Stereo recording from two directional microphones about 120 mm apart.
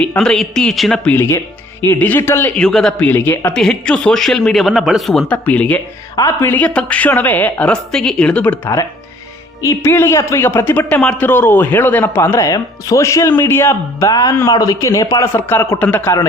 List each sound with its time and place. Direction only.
0.2 s speech: 5° left (ahead or behind)
1.1 s a man's voice: 20° left (ahead or behind)
2.6 s speech: 5° left (ahead or behind)
3.1 s a woman's voice: 15° left (ahead or behind)
5.5 s a woman's voice: 10° left (ahead or behind)